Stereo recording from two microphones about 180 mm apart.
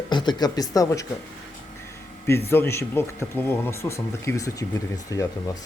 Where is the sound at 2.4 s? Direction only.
15° left (ahead or behind).